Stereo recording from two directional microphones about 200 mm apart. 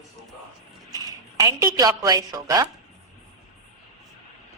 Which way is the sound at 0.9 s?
15° right (ahead or behind).